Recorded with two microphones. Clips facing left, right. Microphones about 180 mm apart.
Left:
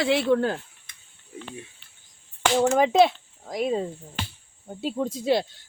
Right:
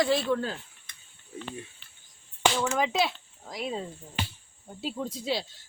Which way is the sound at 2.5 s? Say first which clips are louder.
Left 8 dB; 55° left (ahead or behind).